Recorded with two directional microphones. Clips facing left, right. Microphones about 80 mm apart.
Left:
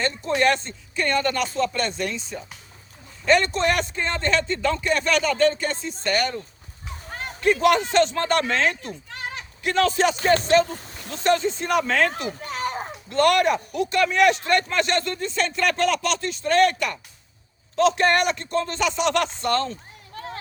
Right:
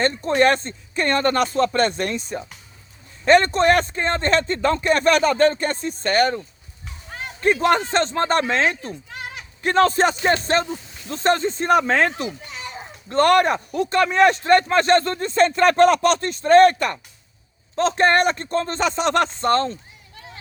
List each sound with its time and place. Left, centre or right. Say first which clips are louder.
0.0 s speech: right 4 dB; right
7.4 s speech: right 1 dB; right
10.8 s a sound: left 2 dB; left
11.1 s speech: right 1 dB; right
12.1 s children playing: even; left
13.1 s speech: right 3 dB; right